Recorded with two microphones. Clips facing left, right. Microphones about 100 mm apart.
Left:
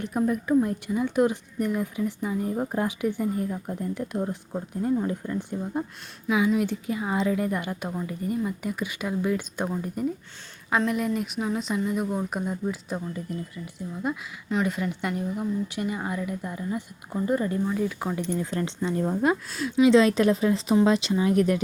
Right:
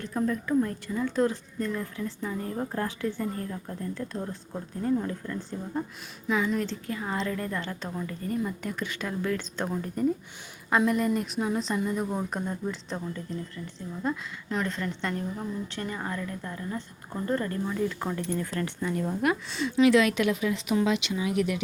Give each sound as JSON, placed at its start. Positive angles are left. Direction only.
{"t": 0.0, "sound": "a woman's voice", "side_deg": 15}
{"t": 6.2, "sound": "a woman's voice", "side_deg": 5}
{"t": 19.5, "sound": "a woman's voice", "side_deg": 0}
{"t": 19.7, "sound": "a woman's voice", "side_deg": 25}